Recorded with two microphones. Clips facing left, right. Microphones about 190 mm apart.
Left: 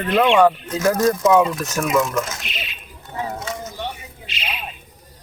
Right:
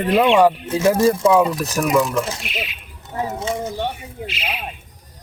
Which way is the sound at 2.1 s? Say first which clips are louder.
Right 2 dB; 30° right (ahead or behind).